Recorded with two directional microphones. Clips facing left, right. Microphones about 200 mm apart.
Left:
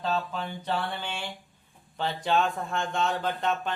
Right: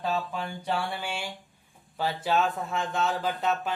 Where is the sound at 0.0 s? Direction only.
10° right (ahead or behind).